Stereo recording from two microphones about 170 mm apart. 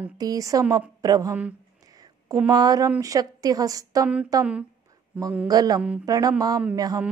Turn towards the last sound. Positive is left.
turn(degrees=-20)  # may be behind; listen again after turning